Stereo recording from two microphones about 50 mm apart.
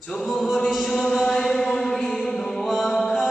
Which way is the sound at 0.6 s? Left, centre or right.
Centre.